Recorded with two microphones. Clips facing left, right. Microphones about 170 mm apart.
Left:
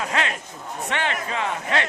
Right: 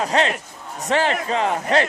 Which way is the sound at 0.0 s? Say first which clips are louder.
Right 6 dB; 35° right (ahead or behind).